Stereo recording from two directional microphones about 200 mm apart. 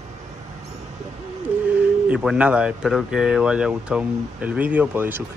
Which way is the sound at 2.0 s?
5° right (ahead or behind).